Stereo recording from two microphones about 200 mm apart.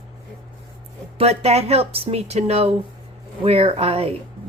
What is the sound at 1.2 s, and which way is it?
A woman's voice, 30° right (ahead or behind).